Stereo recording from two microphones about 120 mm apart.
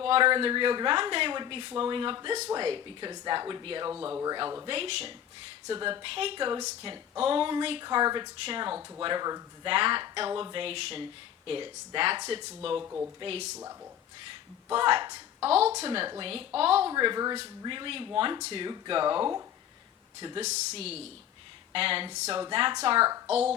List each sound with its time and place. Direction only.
0.0 s speech: 45° right (ahead or behind)
3.9 s speech: 15° right (ahead or behind)
4.6 s speech: 50° right (ahead or behind)
5.6 s speech: 40° right (ahead or behind)
9.6 s speech: 45° right (ahead or behind)
12.8 s speech: 20° right (ahead or behind)
13.1 s speech: 50° right (ahead or behind)
14.7 s speech: 50° right (ahead or behind)
15.4 s speech: 60° right (ahead or behind)
16.0 s speech: 40° right (ahead or behind)
16.6 s speech: 55° right (ahead or behind)
16.9 s speech: 35° right (ahead or behind)
20.4 s speech: 70° right (ahead or behind); by 23.0 s 50° right (ahead or behind)
23.0 s a woman's voice: 30° right (ahead or behind)